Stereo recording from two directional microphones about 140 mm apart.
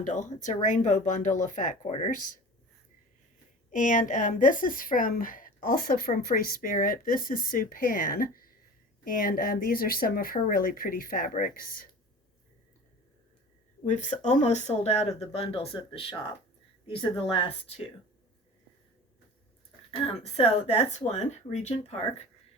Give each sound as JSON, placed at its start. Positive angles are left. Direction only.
{"t": 0.0, "sound": "speech", "side_deg": 60}
{"t": 3.7, "sound": "a woman's voice", "side_deg": 65}
{"t": 13.8, "sound": "speech", "side_deg": 60}
{"t": 20.3, "sound": "speech", "side_deg": 45}